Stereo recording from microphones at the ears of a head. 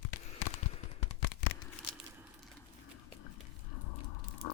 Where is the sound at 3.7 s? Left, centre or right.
Left.